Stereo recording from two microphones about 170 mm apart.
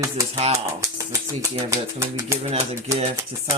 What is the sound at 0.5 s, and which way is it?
Speech, 20° right (ahead or behind).